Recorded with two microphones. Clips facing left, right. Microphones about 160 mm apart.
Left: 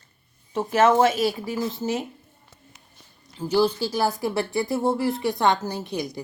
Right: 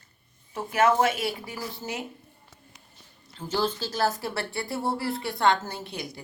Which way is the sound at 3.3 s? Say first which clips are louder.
Left 7 dB; 15° left (ahead or behind).